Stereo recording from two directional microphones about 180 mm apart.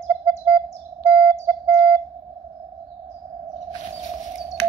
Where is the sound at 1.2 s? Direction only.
10° right (ahead or behind).